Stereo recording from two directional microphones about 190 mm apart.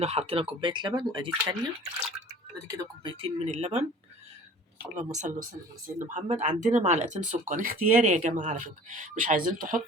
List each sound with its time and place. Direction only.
0.0 s speech: 35° right (ahead or behind)
2.6 s speech: 20° right (ahead or behind)
5.1 s speech: 40° right (ahead or behind)